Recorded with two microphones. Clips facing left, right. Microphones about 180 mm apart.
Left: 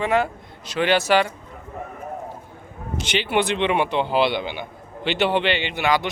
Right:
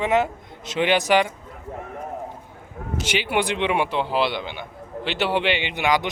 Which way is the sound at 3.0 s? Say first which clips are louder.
Left 2 dB; 10° right (ahead or behind).